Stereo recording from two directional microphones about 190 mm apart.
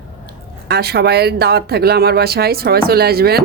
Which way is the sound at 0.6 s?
55° right (ahead or behind).